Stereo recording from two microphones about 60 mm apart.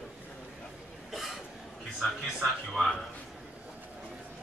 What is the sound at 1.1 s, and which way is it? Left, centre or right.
Cough, centre.